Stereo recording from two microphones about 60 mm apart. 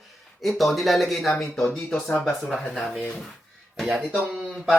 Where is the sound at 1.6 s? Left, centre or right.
Centre.